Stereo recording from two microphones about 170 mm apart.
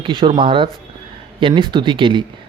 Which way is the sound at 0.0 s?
30° right (ahead or behind).